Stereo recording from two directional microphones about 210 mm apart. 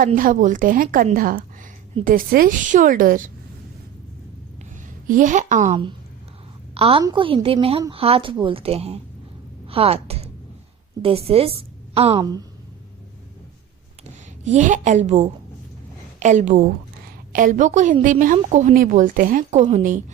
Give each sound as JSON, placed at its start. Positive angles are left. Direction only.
{"t": 0.0, "sound": "a woman's voice", "side_deg": -40}
{"t": 5.0, "sound": "a woman's voice", "side_deg": -40}
{"t": 6.7, "sound": "a woman's voice", "side_deg": -30}
{"t": 14.4, "sound": "a woman's voice", "side_deg": -35}